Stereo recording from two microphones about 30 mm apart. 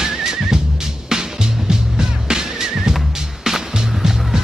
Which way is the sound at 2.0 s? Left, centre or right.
Right.